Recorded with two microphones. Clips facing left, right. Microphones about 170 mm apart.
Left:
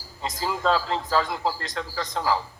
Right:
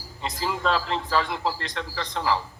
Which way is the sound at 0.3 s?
35° left (ahead or behind).